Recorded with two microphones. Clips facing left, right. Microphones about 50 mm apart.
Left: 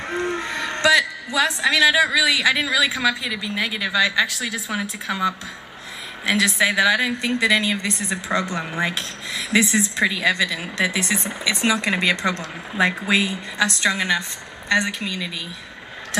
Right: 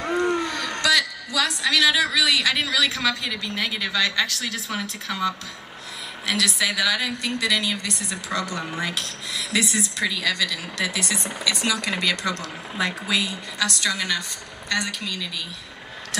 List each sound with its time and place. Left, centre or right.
0.0 s a man's voice: left